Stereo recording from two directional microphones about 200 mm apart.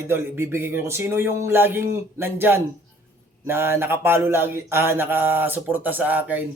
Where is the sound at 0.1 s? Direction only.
10° right (ahead or behind).